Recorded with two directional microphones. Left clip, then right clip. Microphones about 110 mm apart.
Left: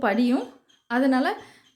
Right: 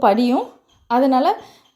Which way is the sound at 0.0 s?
35° right (ahead or behind).